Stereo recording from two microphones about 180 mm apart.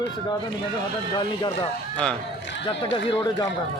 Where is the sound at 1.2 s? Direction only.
25° left (ahead or behind).